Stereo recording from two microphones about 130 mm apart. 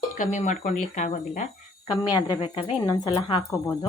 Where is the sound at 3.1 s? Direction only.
40° left (ahead or behind).